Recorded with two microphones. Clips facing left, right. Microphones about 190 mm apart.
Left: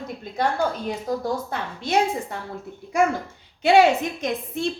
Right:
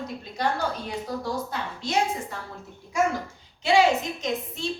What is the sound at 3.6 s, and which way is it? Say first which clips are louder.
A woman's voice: left 4 dB; 60° left (ahead or behind).